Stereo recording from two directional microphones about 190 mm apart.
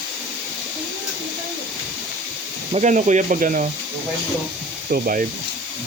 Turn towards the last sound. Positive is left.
turn(degrees=-45)  # may be behind; listen again after turning